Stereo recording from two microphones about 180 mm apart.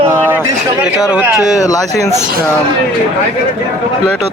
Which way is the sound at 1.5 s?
20° left (ahead or behind).